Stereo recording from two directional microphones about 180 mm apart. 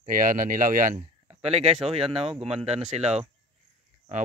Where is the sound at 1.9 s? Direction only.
30° right (ahead or behind).